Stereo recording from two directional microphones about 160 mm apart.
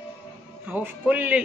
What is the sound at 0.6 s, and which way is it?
Speech, 10° right (ahead or behind).